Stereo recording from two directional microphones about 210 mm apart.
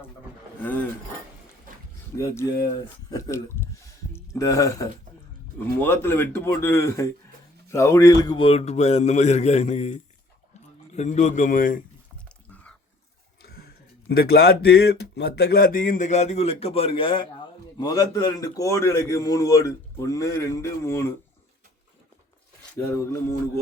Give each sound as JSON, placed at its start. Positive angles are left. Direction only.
{"t": 0.6, "sound": "speech", "side_deg": 10}
{"t": 2.1, "sound": "a man's voice", "side_deg": 15}
{"t": 13.4, "sound": "music", "side_deg": 45}
{"t": 14.2, "sound": "a man's voice", "side_deg": 45}